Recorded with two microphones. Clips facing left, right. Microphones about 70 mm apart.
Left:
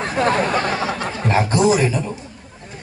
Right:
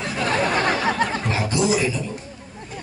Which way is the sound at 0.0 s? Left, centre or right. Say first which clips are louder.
Left 5 dB; left.